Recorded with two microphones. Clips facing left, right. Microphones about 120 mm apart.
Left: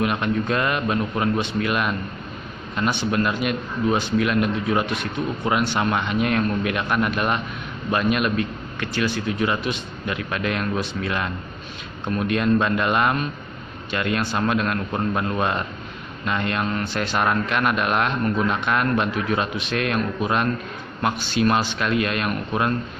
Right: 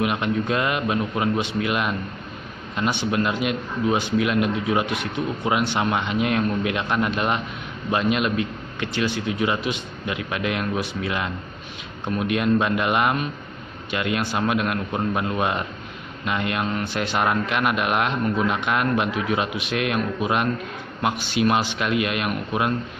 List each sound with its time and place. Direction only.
0.0 s a man's voice: 15° right (ahead or behind)